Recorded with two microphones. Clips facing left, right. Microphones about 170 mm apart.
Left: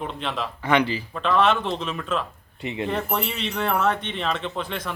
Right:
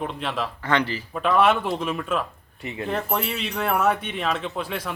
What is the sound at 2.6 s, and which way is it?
Speech, 20° left (ahead or behind).